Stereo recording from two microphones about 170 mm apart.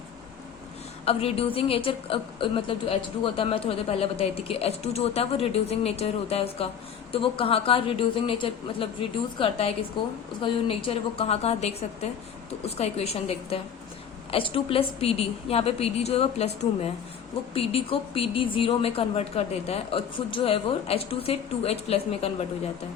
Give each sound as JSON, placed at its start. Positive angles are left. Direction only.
{"t": 1.0, "sound": "a woman's voice", "side_deg": 35}